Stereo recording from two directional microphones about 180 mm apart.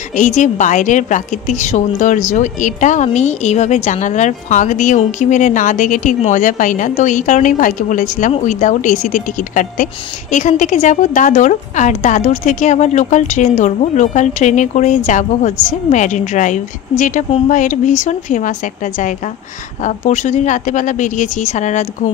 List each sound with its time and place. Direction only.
0.1 s a woman's voice: 45° left (ahead or behind)